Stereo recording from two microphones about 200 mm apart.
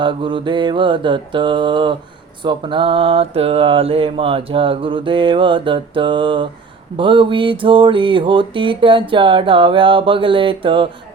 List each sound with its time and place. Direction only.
0.0 s mantra: 25° right (ahead or behind)